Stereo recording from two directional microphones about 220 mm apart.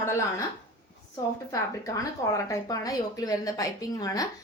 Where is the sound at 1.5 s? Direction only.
15° left (ahead or behind).